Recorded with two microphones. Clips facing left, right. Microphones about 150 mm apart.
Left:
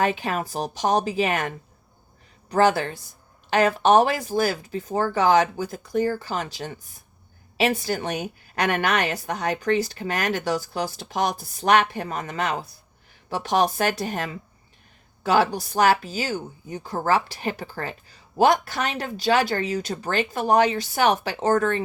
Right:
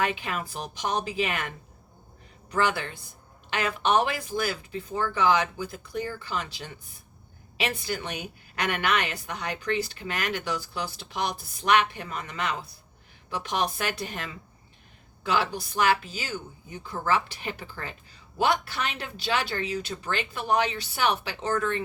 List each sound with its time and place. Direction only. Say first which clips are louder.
0.0 s speech: left 5 dB; 35° left (ahead or behind)